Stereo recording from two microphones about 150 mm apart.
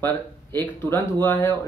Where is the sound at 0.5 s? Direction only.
15° left (ahead or behind).